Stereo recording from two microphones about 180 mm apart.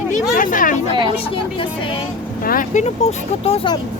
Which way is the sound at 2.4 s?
50° left (ahead or behind).